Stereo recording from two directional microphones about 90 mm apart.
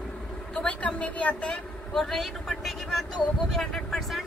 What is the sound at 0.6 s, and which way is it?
A woman's voice, 15° left (ahead or behind).